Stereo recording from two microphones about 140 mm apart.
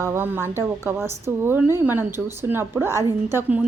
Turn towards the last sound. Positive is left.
turn(degrees=-15)  # may be behind; listen again after turning